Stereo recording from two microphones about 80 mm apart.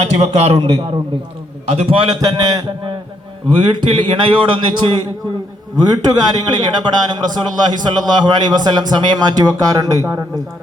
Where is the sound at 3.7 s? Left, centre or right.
Right.